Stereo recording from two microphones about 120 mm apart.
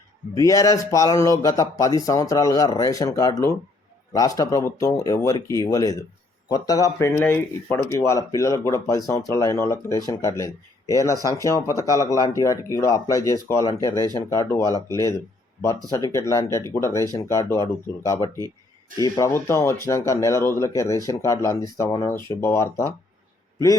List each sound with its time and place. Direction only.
0.3 s speech: 30° left (ahead or behind)
18.9 s speech: 30° left (ahead or behind)